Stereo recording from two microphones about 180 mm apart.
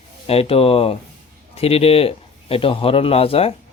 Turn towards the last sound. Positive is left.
turn(degrees=30)  # may be behind; listen again after turning